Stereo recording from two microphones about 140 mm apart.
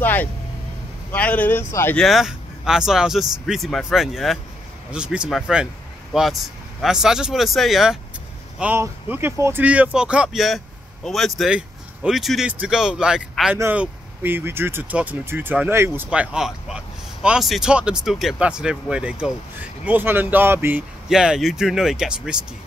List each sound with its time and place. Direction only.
0.0 s speech: 15° left (ahead or behind)
2.0 s speech: centre (ahead or behind); by 20.8 s 15° right (ahead or behind)
21.1 s speech: 5° right (ahead or behind)